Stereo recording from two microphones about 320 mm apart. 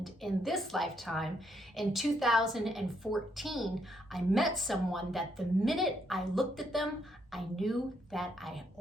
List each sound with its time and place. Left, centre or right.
0.0 s a woman's voice: centre